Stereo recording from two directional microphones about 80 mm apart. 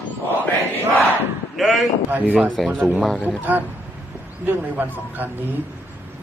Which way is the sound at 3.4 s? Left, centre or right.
Right.